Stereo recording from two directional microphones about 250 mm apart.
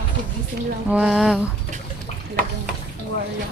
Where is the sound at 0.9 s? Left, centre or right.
Centre.